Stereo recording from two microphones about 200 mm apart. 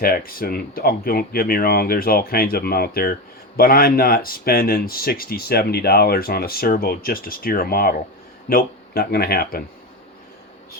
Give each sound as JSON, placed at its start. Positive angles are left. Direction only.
{"t": 0.0, "sound": "speech", "side_deg": 50}